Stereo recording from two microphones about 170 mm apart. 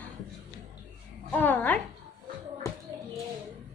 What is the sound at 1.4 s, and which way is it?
Speech, 10° left (ahead or behind).